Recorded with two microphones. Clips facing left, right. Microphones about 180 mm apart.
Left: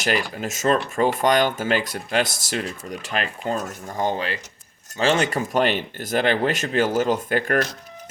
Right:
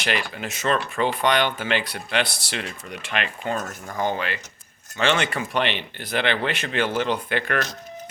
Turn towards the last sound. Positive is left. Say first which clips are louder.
# left 3 dB
turn(degrees=40)  # may be behind; listen again after turning